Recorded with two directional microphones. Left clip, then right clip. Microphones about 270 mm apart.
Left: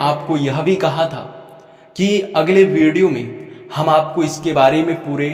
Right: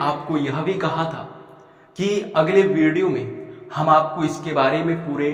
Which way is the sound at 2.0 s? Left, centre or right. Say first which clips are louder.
Left 4 dB; left.